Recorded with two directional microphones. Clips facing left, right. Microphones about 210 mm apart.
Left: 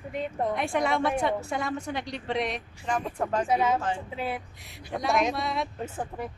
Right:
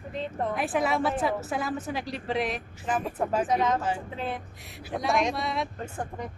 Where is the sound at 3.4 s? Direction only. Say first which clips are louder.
Even; 10° left (ahead or behind).